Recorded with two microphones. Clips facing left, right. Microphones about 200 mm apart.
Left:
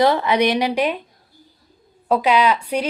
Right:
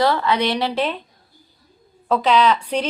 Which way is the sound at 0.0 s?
20° left (ahead or behind).